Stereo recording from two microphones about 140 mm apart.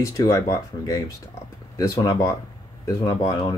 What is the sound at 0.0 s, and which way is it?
Speech, 20° left (ahead or behind).